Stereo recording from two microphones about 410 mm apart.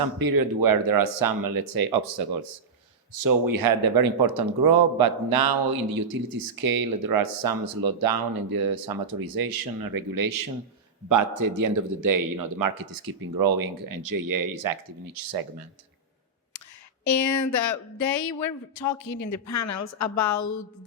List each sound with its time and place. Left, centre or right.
0.0 s speech: right
3.1 s speech: right
17.0 s speech: left